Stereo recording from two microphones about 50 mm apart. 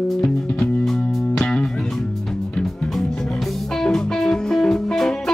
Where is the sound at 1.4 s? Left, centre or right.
Left.